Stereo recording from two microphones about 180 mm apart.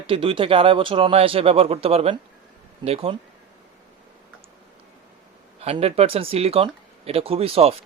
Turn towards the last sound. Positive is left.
turn(degrees=-30)  # may be behind; listen again after turning